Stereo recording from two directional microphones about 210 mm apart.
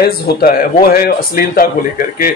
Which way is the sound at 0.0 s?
45° left (ahead or behind).